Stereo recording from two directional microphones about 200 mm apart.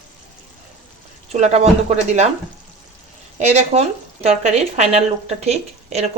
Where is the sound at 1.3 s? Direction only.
35° right (ahead or behind).